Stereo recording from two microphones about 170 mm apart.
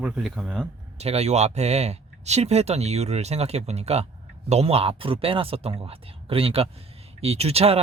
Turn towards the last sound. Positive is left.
turn(degrees=-35)  # may be behind; listen again after turning